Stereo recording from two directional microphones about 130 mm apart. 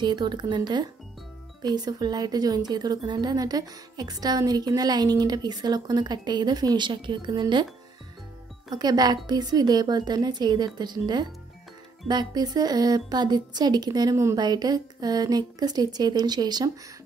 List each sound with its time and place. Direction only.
0.0 s a woman's voice: 35° right (ahead or behind)
8.7 s a woman's voice: 30° right (ahead or behind)